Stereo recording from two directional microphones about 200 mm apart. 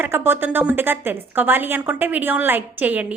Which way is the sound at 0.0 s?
10° right (ahead or behind).